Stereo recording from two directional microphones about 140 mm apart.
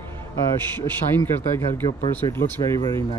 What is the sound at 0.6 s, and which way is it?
Speech, 15° left (ahead or behind).